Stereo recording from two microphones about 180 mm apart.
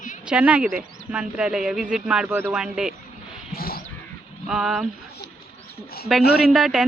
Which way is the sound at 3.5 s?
55° left (ahead or behind).